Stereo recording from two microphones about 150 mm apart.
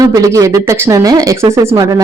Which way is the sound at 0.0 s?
20° right (ahead or behind).